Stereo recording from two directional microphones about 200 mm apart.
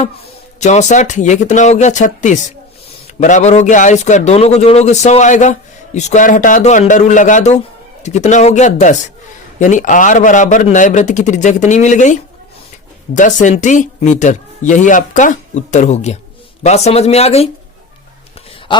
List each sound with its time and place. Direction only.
0.6 s a man's voice: 35° left (ahead or behind)